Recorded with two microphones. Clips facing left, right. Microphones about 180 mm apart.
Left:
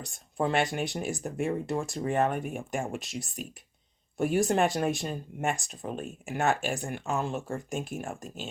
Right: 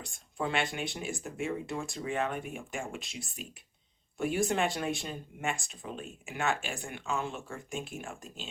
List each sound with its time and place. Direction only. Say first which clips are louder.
0.0 s speech: left 5 dB; 40° left (ahead or behind)